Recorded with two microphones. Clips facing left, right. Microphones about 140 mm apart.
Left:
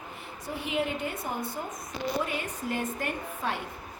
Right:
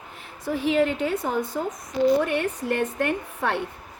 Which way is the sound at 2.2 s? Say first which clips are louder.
Right 8 dB; 70° right (ahead or behind).